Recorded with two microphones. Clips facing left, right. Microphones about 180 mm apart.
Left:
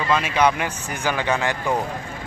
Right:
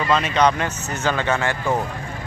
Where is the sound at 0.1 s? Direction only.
10° left (ahead or behind).